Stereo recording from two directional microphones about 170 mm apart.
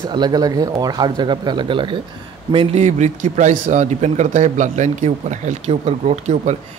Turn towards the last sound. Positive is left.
turn(degrees=-40)  # may be behind; listen again after turning